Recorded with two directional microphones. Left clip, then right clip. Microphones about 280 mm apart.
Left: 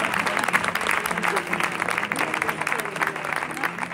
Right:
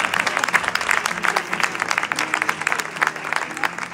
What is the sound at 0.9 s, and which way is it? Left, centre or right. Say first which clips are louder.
Music: right 5 dB; right.